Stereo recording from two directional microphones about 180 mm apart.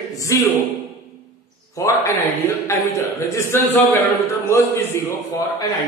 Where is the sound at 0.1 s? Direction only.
20° left (ahead or behind).